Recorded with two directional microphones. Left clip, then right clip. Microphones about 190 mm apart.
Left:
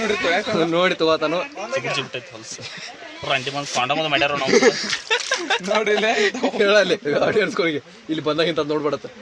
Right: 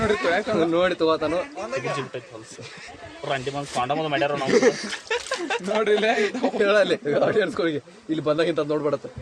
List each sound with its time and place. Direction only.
0.2 s speech: 35° left (ahead or behind)
3.2 s speech: 5° right (ahead or behind)
4.5 s speech: 35° left (ahead or behind)